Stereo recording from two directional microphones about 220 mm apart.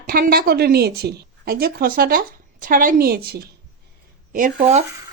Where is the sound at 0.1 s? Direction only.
45° right (ahead or behind).